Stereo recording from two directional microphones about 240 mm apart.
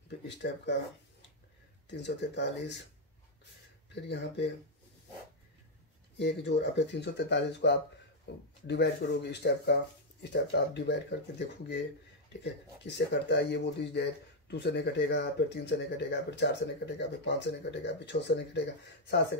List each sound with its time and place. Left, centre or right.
0.3 s speech: left
1.9 s speech: left
3.9 s speech: left
6.1 s speech: left